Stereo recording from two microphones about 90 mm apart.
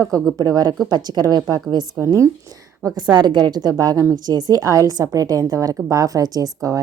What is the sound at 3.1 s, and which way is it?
A woman's voice, 55° right (ahead or behind).